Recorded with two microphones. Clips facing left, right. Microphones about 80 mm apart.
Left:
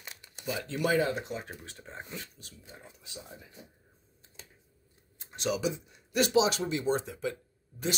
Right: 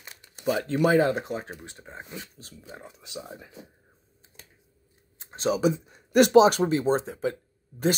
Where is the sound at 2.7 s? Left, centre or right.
Right.